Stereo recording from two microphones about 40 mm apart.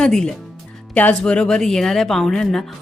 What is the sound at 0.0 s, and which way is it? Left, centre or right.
Speech, centre.